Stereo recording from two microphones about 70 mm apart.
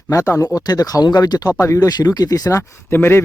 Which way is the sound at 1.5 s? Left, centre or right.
Left.